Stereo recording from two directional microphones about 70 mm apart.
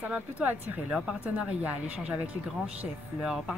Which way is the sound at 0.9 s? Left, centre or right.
Centre.